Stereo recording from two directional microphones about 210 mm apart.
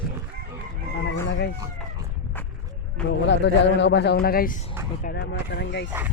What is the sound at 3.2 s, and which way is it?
Speech, 55° left (ahead or behind).